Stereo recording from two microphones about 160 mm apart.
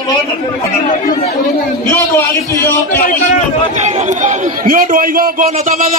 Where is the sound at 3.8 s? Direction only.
50° right (ahead or behind).